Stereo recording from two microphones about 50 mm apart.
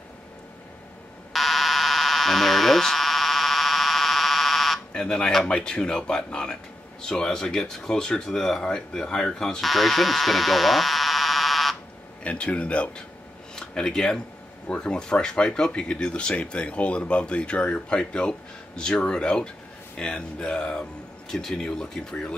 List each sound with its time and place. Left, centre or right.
1.3 s buzzer: centre
4.9 s a sound: centre
5.5 s speech: centre
12.2 s speech: left
13.6 s speech: centre